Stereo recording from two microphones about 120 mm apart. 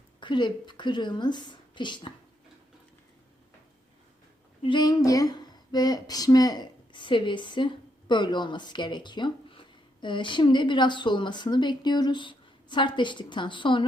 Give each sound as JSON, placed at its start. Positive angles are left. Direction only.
{"t": 0.2, "sound": "a woman's voice", "side_deg": 40}
{"t": 4.6, "sound": "speech", "side_deg": 35}